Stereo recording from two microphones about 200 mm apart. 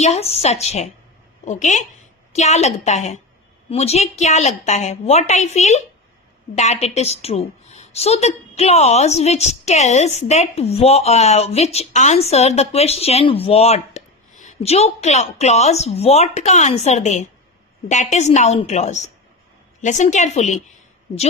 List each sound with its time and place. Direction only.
0.0 s a woman's voice: 30° left (ahead or behind)